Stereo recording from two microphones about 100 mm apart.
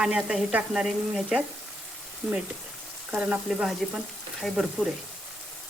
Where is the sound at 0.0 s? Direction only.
10° right (ahead or behind).